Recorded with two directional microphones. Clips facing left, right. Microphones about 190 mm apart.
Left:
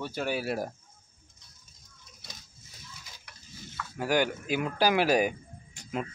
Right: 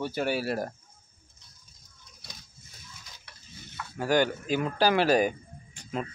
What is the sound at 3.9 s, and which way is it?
Speech, 10° left (ahead or behind).